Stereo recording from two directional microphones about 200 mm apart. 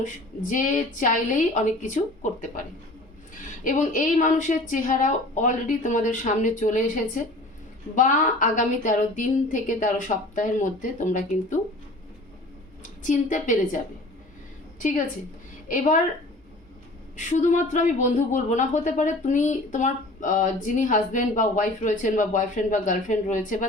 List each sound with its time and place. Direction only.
0.0 s speech: 40° left (ahead or behind)
3.6 s speech: 40° left (ahead or behind)
13.0 s speech: 40° left (ahead or behind)
14.8 s a woman's voice: 40° left (ahead or behind)
17.2 s speech: 40° left (ahead or behind)